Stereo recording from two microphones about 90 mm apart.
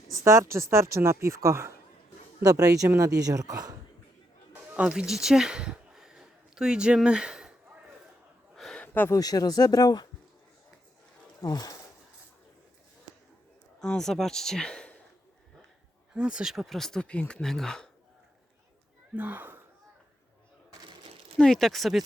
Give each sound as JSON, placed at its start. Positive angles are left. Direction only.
{"t": 0.3, "sound": "speech", "side_deg": -35}
{"t": 4.7, "sound": "speech", "side_deg": -10}
{"t": 8.5, "sound": "a sound", "side_deg": 5}
{"t": 8.8, "sound": "a sound", "side_deg": 20}
{"t": 9.1, "sound": "speech", "side_deg": 45}
{"t": 11.4, "sound": "speech", "side_deg": 45}
{"t": 13.7, "sound": "speech", "side_deg": 10}
{"t": 16.1, "sound": "speech", "side_deg": -10}
{"t": 19.1, "sound": "speech", "side_deg": -20}
{"t": 21.3, "sound": "speech", "side_deg": 5}